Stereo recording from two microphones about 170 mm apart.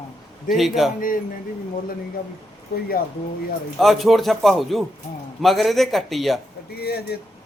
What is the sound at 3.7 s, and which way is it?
Speech, centre (ahead or behind).